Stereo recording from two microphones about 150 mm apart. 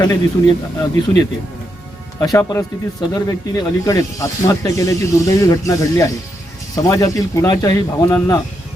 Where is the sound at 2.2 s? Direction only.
20° left (ahead or behind).